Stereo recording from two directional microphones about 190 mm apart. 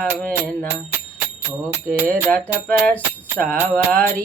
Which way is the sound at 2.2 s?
5° left (ahead or behind).